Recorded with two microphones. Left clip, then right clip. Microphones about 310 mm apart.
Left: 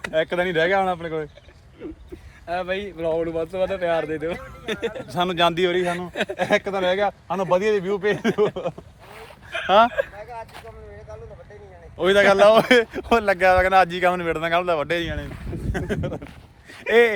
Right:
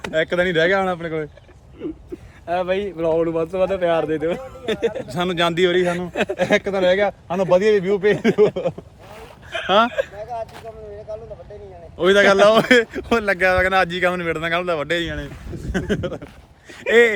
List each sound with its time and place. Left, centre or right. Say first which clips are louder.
0.1 s speech: right 3 dB; centre
2.5 s speech: right 5 dB; centre
5.8 s speech: right 4 dB; centre
9.1 s a sound: right 2 dB; centre
10.2 s a sound: right 6 dB; right
11.9 s a man's voice: right 2 dB; centre